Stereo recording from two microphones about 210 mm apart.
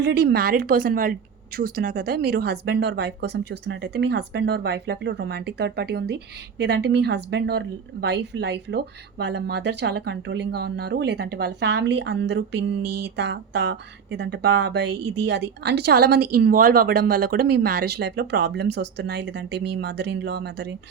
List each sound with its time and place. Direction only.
0.0 s speech: 50° right (ahead or behind)